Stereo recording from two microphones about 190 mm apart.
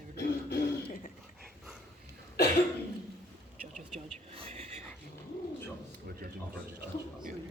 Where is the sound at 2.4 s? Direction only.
60° left (ahead or behind).